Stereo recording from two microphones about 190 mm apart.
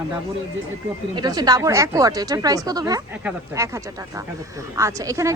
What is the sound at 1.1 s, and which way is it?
Speech, 20° right (ahead or behind).